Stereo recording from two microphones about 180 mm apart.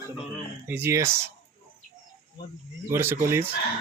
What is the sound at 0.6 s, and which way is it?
Speech, 10° right (ahead or behind).